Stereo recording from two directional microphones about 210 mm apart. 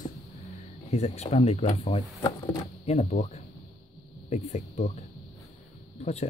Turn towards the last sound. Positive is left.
turn(degrees=30)  # may be behind; listen again after turning